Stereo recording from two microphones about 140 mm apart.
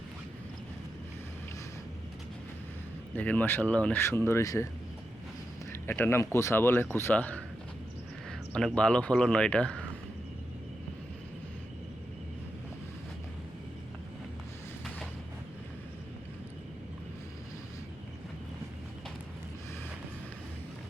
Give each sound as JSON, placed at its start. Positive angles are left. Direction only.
{"t": 3.2, "sound": "speech", "side_deg": 10}
{"t": 5.7, "sound": "speech", "side_deg": 15}
{"t": 8.5, "sound": "speech", "side_deg": 5}